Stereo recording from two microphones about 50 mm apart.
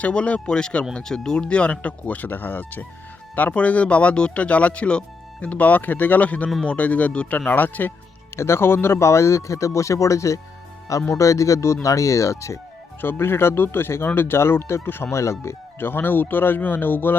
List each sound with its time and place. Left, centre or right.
0.0 s speech: left
3.5 s speech: left
7.3 s speech: left
8.4 s speech: left
13.0 s speech: left
15.1 s speech: left
15.8 s speech: left